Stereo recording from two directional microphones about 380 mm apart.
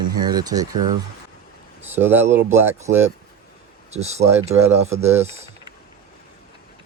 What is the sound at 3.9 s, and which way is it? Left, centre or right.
Speech, centre.